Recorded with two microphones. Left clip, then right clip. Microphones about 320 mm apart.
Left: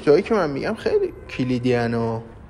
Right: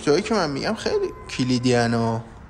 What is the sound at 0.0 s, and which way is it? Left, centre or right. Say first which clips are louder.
A man's voice: left 3 dB; centre.